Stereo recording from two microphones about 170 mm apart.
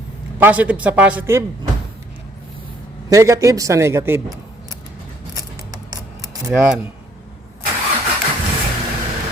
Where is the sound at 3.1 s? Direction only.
20° right (ahead or behind).